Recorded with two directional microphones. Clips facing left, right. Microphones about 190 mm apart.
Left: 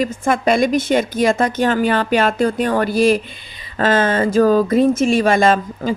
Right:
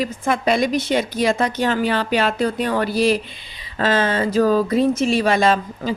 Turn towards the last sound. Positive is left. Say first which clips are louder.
# left 3 dB
turn(degrees=50)  # may be behind; listen again after turning